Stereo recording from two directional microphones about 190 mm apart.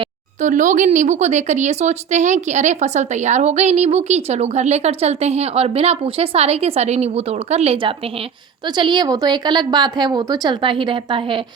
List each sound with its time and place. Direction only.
0.4 s a woman's voice: 40° right (ahead or behind); by 11.3 s 25° right (ahead or behind)